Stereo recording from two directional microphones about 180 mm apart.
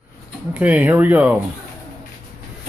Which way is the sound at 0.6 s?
10° right (ahead or behind).